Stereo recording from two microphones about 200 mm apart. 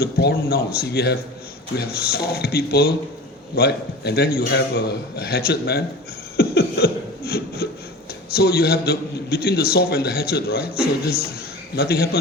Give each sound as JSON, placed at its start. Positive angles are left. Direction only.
{"t": 0.0, "sound": "a man's voice", "side_deg": 55}
{"t": 6.3, "sound": "beatboxing", "side_deg": 50}
{"t": 8.3, "sound": "a man's voice", "side_deg": 50}